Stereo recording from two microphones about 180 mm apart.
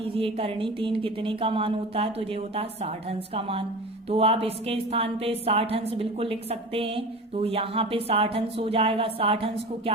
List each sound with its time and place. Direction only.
0.0 s a woman's voice: 30° right (ahead or behind)